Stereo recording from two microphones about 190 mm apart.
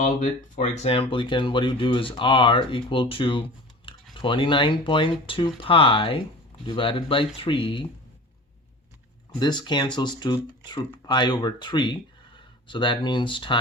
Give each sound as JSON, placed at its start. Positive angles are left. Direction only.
{"t": 0.0, "sound": "speech", "side_deg": 40}
{"t": 9.4, "sound": "speech", "side_deg": 25}